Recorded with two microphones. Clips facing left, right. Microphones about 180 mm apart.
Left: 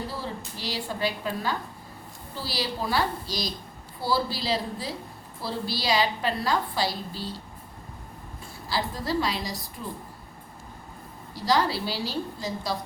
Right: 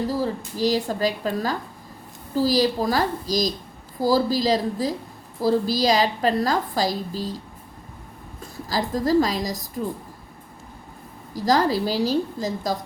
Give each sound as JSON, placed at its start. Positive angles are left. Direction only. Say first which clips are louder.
{"t": 0.1, "sound": "a woman's voice", "louder": "right 9 dB", "side_deg": -40}
{"t": 8.7, "sound": "a woman's voice", "louder": "right 8 dB", "side_deg": -45}
{"t": 11.3, "sound": "a woman's voice", "louder": "right 5 dB", "side_deg": -45}